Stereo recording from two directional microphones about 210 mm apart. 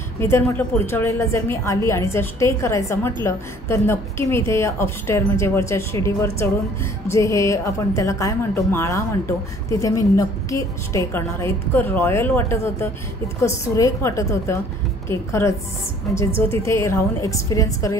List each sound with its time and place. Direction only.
0.2 s a woman's voice: 10° left (ahead or behind)